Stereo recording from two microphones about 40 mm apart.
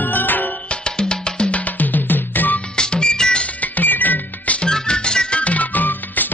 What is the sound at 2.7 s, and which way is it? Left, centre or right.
Music, left.